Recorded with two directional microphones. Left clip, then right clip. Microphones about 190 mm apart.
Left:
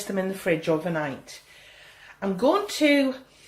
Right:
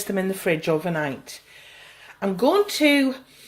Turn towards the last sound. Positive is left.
turn(degrees=-50)  # may be behind; listen again after turning